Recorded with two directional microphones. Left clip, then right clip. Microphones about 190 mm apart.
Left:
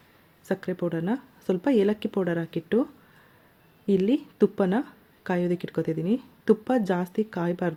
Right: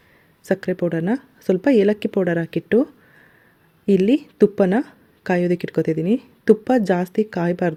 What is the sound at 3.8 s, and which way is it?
Speech, 35° right (ahead or behind).